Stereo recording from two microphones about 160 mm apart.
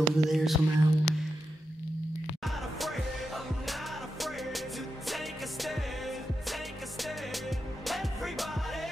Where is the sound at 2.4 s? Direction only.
Centre (ahead or behind).